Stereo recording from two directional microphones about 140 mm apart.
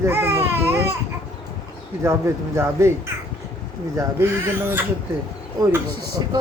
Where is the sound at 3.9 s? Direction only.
20° right (ahead or behind).